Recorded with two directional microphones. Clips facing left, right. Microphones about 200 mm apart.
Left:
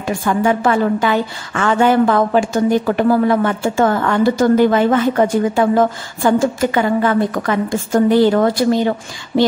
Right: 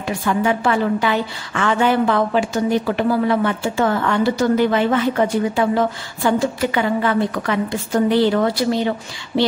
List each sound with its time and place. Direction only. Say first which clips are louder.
0.0 s a woman's voice: left 3 dB; 50° left (ahead or behind)